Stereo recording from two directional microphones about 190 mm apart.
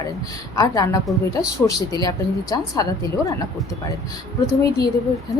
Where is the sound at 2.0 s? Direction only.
20° left (ahead or behind).